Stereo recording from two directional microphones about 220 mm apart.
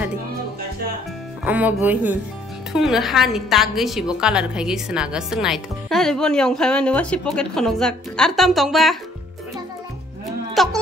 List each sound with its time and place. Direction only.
1.4 s a woman's voice: 5° right (ahead or behind)
10.5 s speech: centre (ahead or behind)